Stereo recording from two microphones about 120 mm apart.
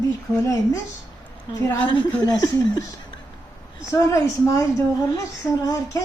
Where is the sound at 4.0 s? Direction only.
25° left (ahead or behind).